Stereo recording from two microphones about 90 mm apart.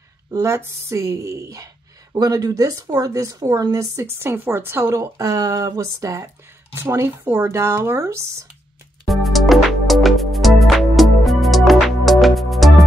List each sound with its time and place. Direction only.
0.3 s a woman's voice: 35° right (ahead or behind)
9.0 s music: centre (ahead or behind)